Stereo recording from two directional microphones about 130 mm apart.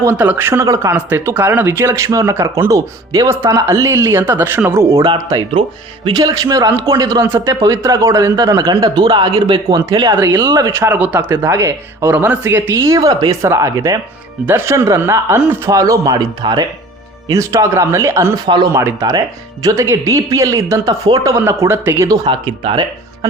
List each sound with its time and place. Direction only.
0.0 s a man's voice: 15° right (ahead or behind); by 10.7 s 35° right (ahead or behind)
10.7 s speech: 20° right (ahead or behind)
18.4 s a man's voice: 35° right (ahead or behind)
18.7 s speech: 20° right (ahead or behind); by 22.8 s 45° right (ahead or behind)